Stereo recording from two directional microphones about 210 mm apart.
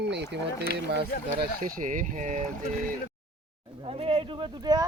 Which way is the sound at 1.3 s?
40° right (ahead or behind).